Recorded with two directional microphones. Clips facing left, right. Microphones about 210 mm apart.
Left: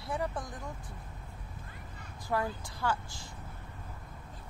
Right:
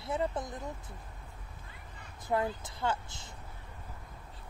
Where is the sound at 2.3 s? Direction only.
20° right (ahead or behind).